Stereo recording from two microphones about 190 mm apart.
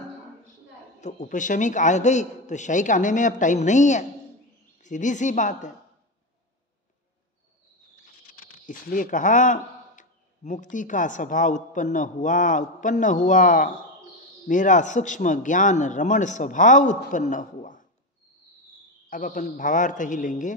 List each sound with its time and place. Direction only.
1.0 s a man's voice: 40° left (ahead or behind)
7.9 s a man's voice: 50° left (ahead or behind)
19.0 s a man's voice: 45° left (ahead or behind)